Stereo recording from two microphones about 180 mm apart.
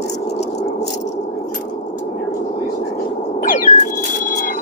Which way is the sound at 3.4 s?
45° left (ahead or behind).